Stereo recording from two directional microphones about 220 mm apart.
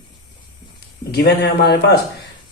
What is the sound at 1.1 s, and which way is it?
Speech, 50° left (ahead or behind).